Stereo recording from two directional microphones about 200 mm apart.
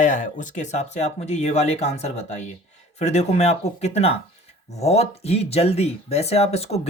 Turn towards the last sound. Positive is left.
turn(degrees=30)  # may be behind; listen again after turning